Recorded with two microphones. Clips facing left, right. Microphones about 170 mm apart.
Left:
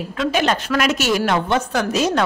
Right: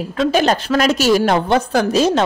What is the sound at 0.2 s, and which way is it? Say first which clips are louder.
A woman's voice: right 4 dB; 35° right (ahead or behind).